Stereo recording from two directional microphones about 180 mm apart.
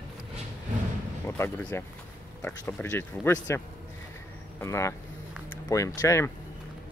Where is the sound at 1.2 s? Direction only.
15° left (ahead or behind).